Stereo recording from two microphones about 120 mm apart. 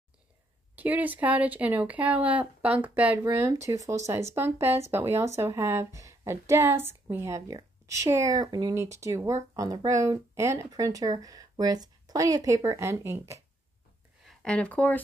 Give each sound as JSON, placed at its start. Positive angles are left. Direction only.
{"t": 0.7, "sound": "speech", "side_deg": -15}
{"t": 3.6, "sound": "speech", "side_deg": -25}
{"t": 14.2, "sound": "speech", "side_deg": 10}